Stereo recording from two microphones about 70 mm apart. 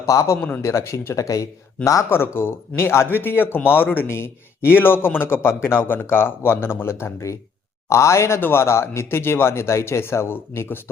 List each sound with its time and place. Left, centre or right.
0.0 s speech: left
2.0 s speech: left